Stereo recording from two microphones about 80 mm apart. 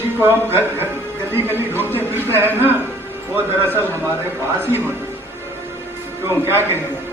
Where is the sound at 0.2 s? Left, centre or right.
Right.